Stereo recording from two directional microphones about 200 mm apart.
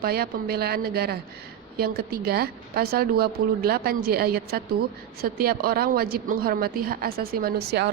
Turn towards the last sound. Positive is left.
turn(degrees=-55)  # may be behind; listen again after turning